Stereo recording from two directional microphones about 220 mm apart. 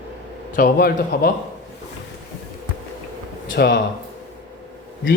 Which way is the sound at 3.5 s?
55° left (ahead or behind).